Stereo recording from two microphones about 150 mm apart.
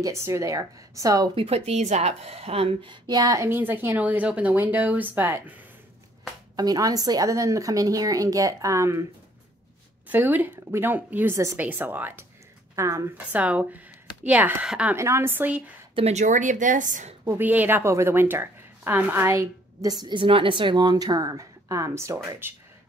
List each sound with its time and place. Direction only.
0.0 s a woman's voice: 20° right (ahead or behind)
1.3 s a woman's voice: 40° right (ahead or behind); by 5.4 s 10° right (ahead or behind)
6.5 s a woman's voice: 25° right (ahead or behind)
10.0 s a woman's voice: 10° right (ahead or behind)
15.0 s a woman's voice: 20° right (ahead or behind)
15.9 s a woman's voice: 45° right (ahead or behind); by 17.1 s 60° right (ahead or behind)
17.2 s a woman's voice: 15° right (ahead or behind)